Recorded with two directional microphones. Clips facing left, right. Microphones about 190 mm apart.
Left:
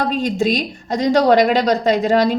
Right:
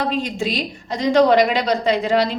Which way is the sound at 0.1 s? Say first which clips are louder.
Left 5 dB; 40° left (ahead or behind).